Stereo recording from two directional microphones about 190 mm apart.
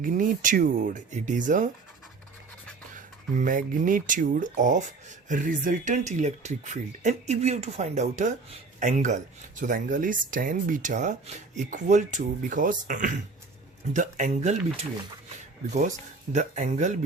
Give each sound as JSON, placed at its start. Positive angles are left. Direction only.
{"t": 0.0, "sound": "speech", "side_deg": -45}
{"t": 2.9, "sound": "speech", "side_deg": -45}
{"t": 16.3, "sound": "speech", "side_deg": -40}